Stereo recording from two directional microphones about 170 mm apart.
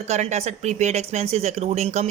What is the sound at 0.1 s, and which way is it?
Speech, 40° right (ahead or behind).